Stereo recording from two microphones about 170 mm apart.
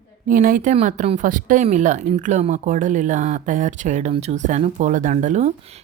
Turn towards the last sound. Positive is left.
turn(degrees=-45)  # may be behind; listen again after turning